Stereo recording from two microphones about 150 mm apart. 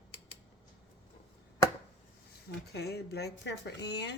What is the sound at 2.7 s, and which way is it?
Speech, 90° left.